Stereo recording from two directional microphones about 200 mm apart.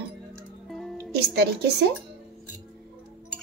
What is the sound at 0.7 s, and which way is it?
Music, centre (ahead or behind).